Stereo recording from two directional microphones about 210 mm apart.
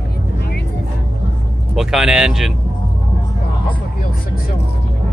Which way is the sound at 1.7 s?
Centre (ahead or behind).